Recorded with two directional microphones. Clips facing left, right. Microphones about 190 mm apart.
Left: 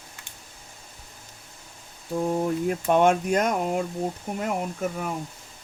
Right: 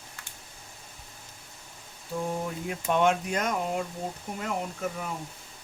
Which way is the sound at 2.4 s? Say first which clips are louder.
Left 7 dB; 45° left (ahead or behind).